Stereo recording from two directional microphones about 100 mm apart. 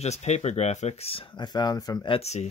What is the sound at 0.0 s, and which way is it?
Speech, 90° left.